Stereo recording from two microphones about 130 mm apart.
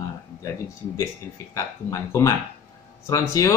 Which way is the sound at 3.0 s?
25° left (ahead or behind).